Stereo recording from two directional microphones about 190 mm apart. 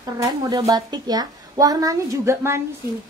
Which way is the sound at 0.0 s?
20° right (ahead or behind).